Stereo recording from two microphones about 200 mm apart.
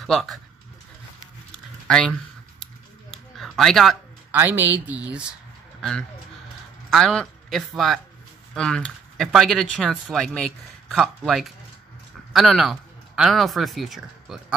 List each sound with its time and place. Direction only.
0.0 s speech: centre (ahead or behind)
1.5 s a sound: 5° left (ahead or behind)
4.4 s speech: 10° right (ahead or behind)
5.8 s a man's voice: 5° left (ahead or behind)